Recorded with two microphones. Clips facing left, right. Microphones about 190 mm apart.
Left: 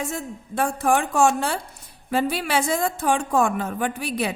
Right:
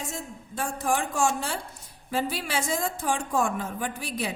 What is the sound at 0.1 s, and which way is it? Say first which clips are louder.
A woman's voice: left 6 dB; 65° left (ahead or behind).